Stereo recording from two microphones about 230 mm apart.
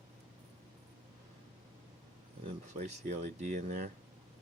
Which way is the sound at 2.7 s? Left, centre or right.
Right.